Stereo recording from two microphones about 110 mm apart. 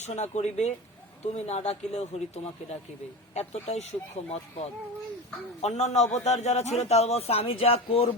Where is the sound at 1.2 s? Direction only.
75° left (ahead or behind).